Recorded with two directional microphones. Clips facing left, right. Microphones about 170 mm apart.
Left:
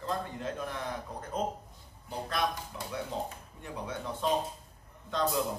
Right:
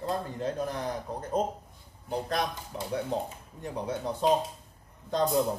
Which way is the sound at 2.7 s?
30° right (ahead or behind).